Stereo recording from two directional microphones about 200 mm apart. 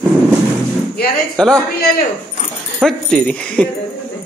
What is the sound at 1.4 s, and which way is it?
Speech, 5° left (ahead or behind).